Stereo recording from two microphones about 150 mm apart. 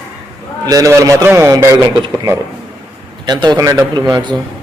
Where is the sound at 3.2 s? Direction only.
30° right (ahead or behind).